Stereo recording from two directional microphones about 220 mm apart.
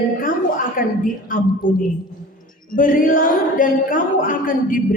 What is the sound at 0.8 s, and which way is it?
A man's voice, 40° left (ahead or behind).